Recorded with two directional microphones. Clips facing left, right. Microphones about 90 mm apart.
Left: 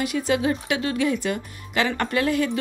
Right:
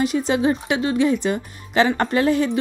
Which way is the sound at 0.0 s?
30° right (ahead or behind).